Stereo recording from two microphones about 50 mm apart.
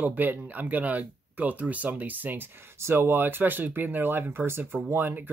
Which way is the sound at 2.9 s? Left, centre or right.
Right.